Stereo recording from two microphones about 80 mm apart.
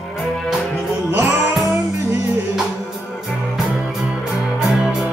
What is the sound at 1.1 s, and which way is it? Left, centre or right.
Music, right.